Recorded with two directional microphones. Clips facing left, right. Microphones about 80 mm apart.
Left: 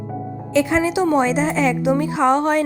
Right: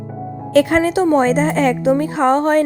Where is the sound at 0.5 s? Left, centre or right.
Right.